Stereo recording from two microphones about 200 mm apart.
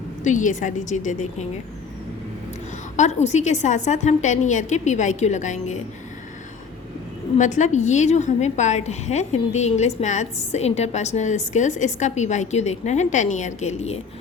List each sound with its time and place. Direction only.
0.3 s a woman's voice: 40° left (ahead or behind)
2.9 s a woman's voice: 35° left (ahead or behind)
7.3 s a woman's voice: 40° left (ahead or behind)